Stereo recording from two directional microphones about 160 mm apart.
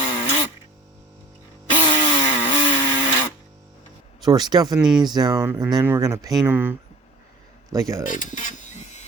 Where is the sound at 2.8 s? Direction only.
25° left (ahead or behind).